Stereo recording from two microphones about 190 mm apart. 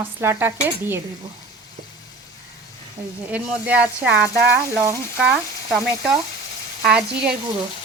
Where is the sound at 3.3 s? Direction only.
5° right (ahead or behind).